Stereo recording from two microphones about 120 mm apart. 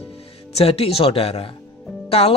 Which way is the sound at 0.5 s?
55° left (ahead or behind).